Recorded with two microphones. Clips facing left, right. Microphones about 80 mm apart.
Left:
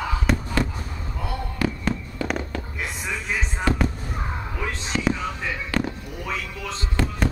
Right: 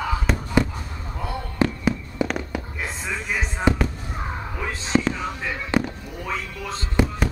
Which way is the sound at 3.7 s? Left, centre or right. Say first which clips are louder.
Right 3 dB; centre.